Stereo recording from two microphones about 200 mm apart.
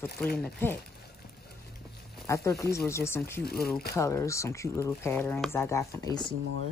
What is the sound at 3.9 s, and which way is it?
Speech, 15° left (ahead or behind).